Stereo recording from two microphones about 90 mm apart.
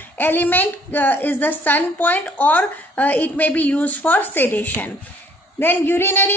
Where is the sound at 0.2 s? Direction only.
20° left (ahead or behind).